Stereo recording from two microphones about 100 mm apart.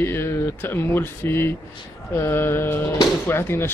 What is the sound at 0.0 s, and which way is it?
Speech, 20° left (ahead or behind).